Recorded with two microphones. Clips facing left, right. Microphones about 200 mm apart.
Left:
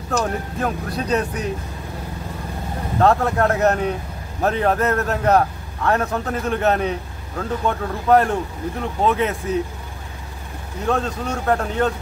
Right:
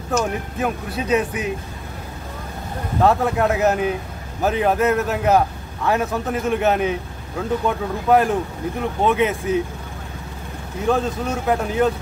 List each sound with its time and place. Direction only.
0.2 s a man's voice: 5° right (ahead or behind)
3.0 s a man's voice: centre (ahead or behind)
10.9 s a man's voice: 5° right (ahead or behind)